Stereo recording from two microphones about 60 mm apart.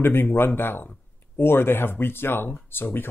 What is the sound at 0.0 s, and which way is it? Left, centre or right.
Speech, left.